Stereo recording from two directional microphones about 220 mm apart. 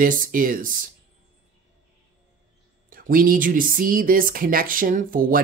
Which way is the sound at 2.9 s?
40° right (ahead or behind).